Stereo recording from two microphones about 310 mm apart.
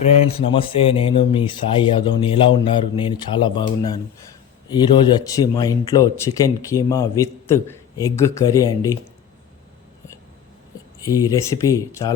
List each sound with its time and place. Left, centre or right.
0.0 s speech: centre
11.0 s speech: centre